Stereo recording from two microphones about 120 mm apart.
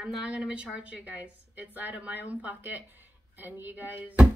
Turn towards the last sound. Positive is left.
turn(degrees=-15)  # may be behind; listen again after turning